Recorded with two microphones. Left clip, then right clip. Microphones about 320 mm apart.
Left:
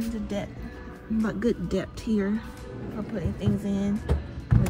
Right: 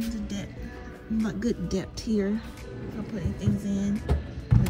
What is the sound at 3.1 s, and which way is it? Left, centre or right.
Speech, centre.